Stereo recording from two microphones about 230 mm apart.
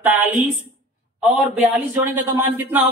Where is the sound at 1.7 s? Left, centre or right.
Centre.